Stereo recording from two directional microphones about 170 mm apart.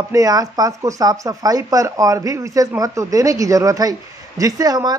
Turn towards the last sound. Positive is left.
turn(degrees=-25)  # may be behind; listen again after turning